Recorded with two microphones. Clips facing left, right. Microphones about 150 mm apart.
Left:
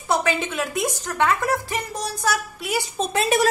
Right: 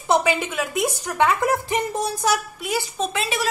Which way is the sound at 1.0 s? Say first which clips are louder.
Right 2 dB; 15° right (ahead or behind).